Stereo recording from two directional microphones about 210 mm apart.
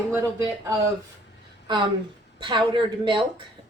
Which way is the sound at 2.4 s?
20° right (ahead or behind).